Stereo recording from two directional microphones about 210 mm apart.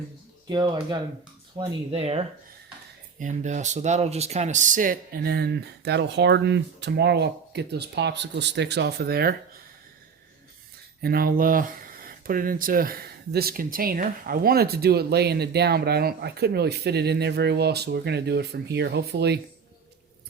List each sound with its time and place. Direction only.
0.4 s speech: 20° right (ahead or behind); by 9.3 s 50° right (ahead or behind)
11.0 s speech: 45° right (ahead or behind)